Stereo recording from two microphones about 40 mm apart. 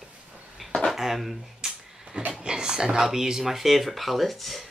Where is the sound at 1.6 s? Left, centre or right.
Centre.